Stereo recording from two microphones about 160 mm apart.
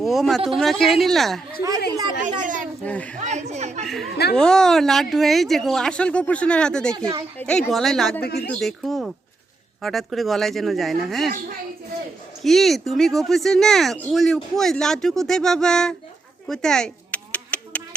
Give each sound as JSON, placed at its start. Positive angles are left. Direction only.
{"t": 0.0, "sound": "speech", "side_deg": 0}
{"t": 2.4, "sound": "speech", "side_deg": -55}
{"t": 2.8, "sound": "speech", "side_deg": 10}
{"t": 3.2, "sound": "speech", "side_deg": -45}
{"t": 3.8, "sound": "speech", "side_deg": 0}
{"t": 6.9, "sound": "speech", "side_deg": -25}
{"t": 7.3, "sound": "speech", "side_deg": 10}
{"t": 8.2, "sound": "speech", "side_deg": 90}
{"t": 8.5, "sound": "speech", "side_deg": 0}
{"t": 12.4, "sound": "speech", "side_deg": 0}
{"t": 16.5, "sound": "a sound", "side_deg": 5}